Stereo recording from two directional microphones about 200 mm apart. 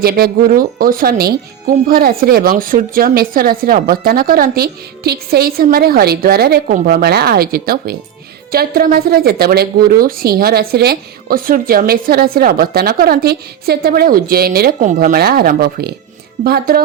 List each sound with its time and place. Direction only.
0.0 s speech: 50° right (ahead or behind)